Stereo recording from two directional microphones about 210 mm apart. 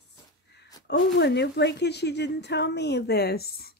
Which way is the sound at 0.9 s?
55° left (ahead or behind).